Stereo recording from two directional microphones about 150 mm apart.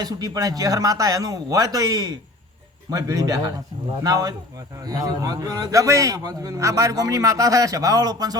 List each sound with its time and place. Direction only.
0.0 s a man's voice: 25° right (ahead or behind)